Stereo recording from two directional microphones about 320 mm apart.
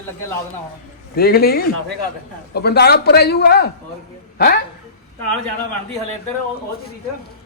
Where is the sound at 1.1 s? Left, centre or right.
Left.